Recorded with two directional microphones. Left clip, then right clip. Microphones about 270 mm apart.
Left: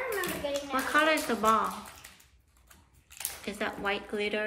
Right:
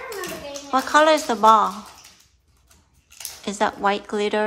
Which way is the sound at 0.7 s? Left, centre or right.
Centre.